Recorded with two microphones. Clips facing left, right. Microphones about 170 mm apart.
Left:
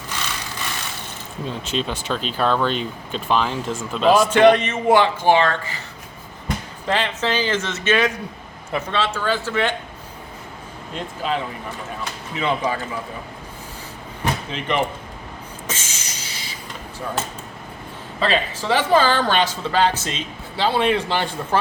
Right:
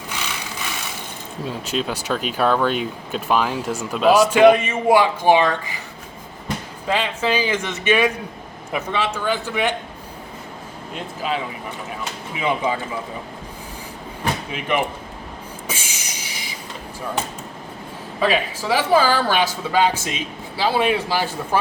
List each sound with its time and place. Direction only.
0.1 s vehicle: 10° right (ahead or behind)
1.5 s speech: 5° right (ahead or behind)
6.8 s speech: 10° right (ahead or behind)
10.9 s speech: 5° right (ahead or behind)
14.5 s speech: 10° right (ahead or behind)
15.6 s train: 10° right (ahead or behind)
18.2 s speech: 10° right (ahead or behind)